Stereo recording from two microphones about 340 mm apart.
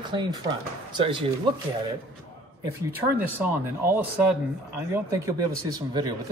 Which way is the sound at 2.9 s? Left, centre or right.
Centre.